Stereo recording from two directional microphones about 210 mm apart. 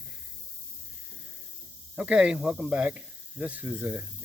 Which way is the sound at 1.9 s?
5° right (ahead or behind).